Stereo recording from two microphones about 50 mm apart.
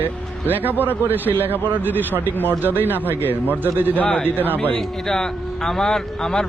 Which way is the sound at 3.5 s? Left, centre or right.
Right.